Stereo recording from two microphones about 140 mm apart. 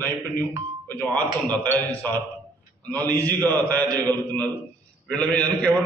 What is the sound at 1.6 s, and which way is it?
A man's voice, 15° left (ahead or behind).